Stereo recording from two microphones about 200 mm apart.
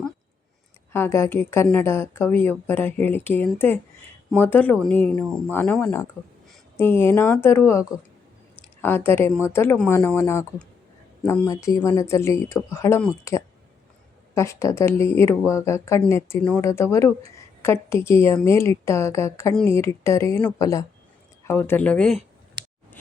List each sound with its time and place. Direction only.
0.9 s a woman's voice: 10° left (ahead or behind)